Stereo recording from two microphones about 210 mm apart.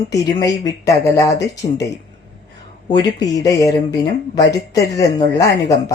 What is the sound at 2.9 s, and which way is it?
A woman's voice, 20° left (ahead or behind).